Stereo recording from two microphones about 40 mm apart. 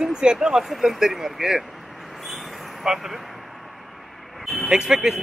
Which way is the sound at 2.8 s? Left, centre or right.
Centre.